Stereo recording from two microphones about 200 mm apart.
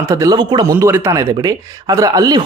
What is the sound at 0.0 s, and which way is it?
Speech, 15° right (ahead or behind).